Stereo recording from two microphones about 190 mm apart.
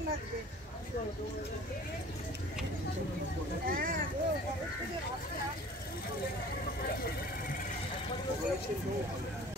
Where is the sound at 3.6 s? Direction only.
50° right (ahead or behind).